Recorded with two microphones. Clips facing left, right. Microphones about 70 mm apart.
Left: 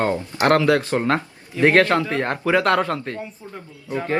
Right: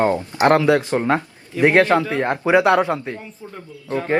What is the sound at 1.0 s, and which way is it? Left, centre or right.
Speech, centre.